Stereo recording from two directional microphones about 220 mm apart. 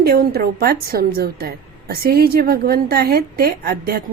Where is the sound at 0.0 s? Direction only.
45° right (ahead or behind).